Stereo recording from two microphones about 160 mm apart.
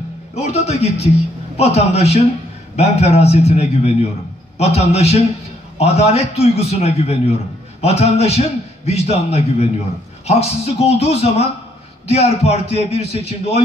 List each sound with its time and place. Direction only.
0.3 s a man's voice: 40° left (ahead or behind)